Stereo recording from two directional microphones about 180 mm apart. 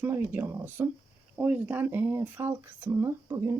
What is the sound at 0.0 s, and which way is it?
Speech, 10° right (ahead or behind).